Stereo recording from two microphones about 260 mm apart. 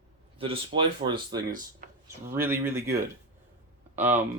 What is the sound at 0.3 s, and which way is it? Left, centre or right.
Speech, right.